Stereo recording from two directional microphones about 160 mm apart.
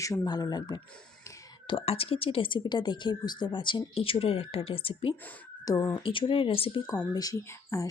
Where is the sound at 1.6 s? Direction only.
35° left (ahead or behind).